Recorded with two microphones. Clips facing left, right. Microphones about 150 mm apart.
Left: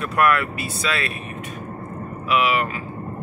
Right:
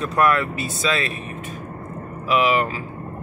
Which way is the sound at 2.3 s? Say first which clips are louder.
Right 2 dB; 35° right (ahead or behind).